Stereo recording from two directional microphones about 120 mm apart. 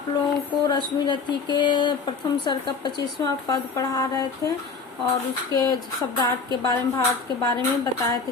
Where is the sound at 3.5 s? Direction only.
30° left (ahead or behind).